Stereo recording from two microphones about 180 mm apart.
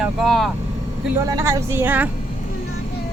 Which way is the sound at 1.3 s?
20° right (ahead or behind).